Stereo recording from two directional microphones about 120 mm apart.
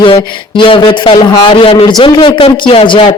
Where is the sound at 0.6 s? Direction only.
45° left (ahead or behind).